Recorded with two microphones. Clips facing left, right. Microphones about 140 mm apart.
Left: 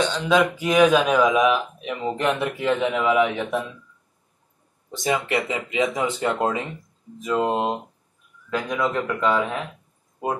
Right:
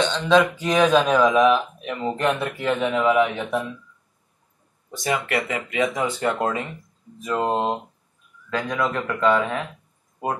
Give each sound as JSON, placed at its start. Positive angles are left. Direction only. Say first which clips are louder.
{"t": 0.0, "sound": "speech", "louder": "right 2 dB", "side_deg": 5}
{"t": 3.2, "sound": "speech", "louder": "even", "side_deg": 5}
{"t": 4.9, "sound": "speech", "louder": "left 1 dB", "side_deg": 20}